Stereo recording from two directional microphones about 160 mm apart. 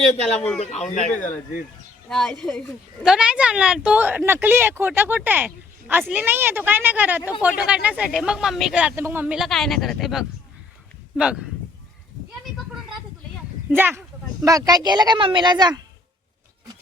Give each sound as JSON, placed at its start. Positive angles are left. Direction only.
{"t": 0.3, "sound": "speech", "side_deg": 5}
{"t": 0.6, "sound": "a man's voice", "side_deg": 45}
{"t": 2.0, "sound": "speech", "side_deg": 5}
{"t": 13.7, "sound": "speech", "side_deg": -10}